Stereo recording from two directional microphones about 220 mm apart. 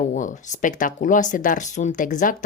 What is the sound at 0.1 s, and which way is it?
Speech, 35° left (ahead or behind).